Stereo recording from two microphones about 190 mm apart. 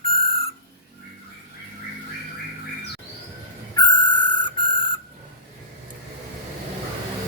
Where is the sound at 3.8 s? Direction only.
25° left (ahead or behind).